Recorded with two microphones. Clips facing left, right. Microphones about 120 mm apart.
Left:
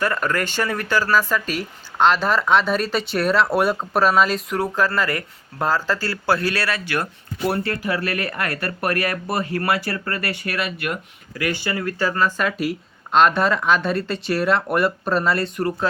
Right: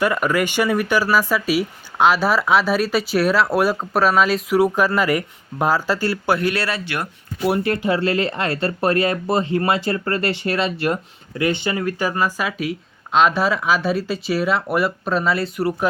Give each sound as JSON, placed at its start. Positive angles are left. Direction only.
{"t": 0.0, "sound": "speech", "side_deg": -10}
{"t": 7.0, "sound": "speech", "side_deg": -15}